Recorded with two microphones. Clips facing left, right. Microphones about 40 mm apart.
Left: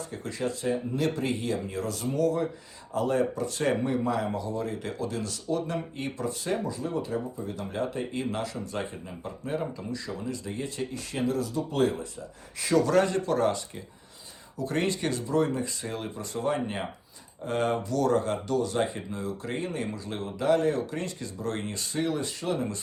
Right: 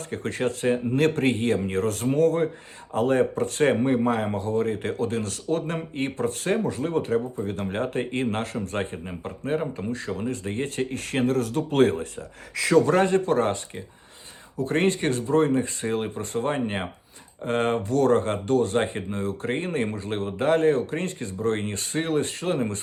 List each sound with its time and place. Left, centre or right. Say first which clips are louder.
0.1 s speech: right 7 dB; right
12.8 s speech: right 3 dB; right